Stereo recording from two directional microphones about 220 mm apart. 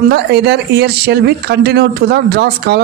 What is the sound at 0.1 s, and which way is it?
Speech, 50° right (ahead or behind).